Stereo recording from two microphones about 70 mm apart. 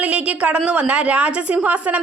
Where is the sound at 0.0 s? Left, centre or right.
Centre.